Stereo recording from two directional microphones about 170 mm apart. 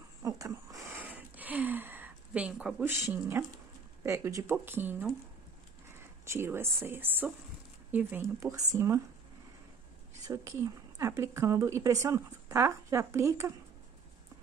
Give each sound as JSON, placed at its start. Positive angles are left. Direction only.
{"t": 0.2, "sound": "a sound", "side_deg": -20}
{"t": 4.0, "sound": "speech", "side_deg": -15}
{"t": 6.2, "sound": "speech", "side_deg": -15}
{"t": 10.2, "sound": "speech", "side_deg": -15}